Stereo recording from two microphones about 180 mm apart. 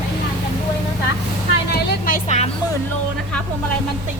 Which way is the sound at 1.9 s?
50° left (ahead or behind).